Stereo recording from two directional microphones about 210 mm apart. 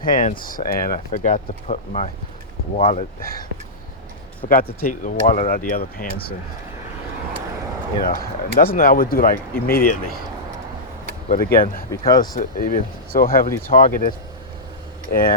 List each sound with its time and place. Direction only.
0.0 s speech: 40° left (ahead or behind)
4.4 s speech: 40° left (ahead or behind)
8.1 s speech: 45° left (ahead or behind)
11.3 s speech: 45° left (ahead or behind)
11.6 s speech: 15° left (ahead or behind)
12.3 s speech: 40° left (ahead or behind)
15.1 s speech: 45° left (ahead or behind)